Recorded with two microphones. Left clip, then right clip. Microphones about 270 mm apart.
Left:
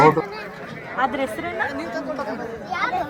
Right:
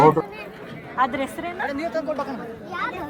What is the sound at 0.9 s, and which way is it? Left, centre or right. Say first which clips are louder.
Speech: even; right.